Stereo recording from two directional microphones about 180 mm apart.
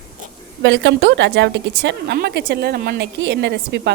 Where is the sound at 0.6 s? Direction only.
75° right (ahead or behind).